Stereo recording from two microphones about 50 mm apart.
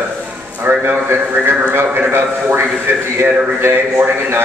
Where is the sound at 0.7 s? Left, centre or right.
Right.